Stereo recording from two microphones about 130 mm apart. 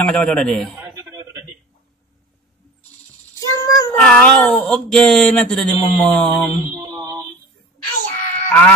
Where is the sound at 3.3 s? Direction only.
30° left (ahead or behind).